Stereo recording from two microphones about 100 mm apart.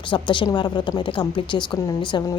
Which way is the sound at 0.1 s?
55° left (ahead or behind).